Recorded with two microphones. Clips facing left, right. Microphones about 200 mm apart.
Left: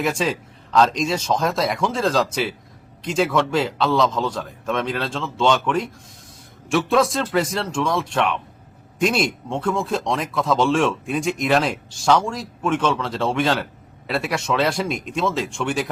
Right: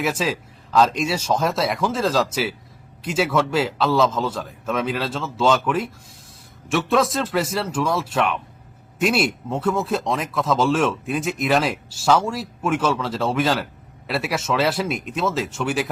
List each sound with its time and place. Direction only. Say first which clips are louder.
0.0 s speech: left 1 dB; 5° right (ahead or behind)